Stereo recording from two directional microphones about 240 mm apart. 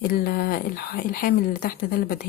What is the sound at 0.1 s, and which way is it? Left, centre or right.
Speech, left.